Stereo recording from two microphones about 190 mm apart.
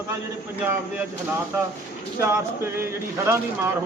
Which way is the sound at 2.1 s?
15° right (ahead or behind).